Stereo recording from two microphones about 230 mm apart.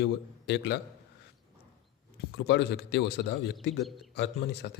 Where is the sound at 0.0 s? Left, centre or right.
Left.